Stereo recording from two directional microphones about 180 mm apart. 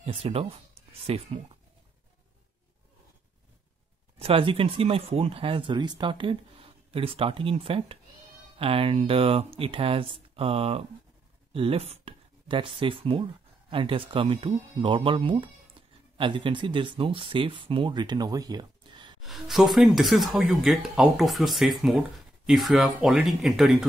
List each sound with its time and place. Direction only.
0.0 s speech: 35° right (ahead or behind)
4.2 s speech: 30° right (ahead or behind)
19.2 s speech: centre (ahead or behind)